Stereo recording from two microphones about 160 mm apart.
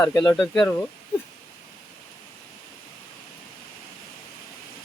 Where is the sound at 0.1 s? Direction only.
20° left (ahead or behind).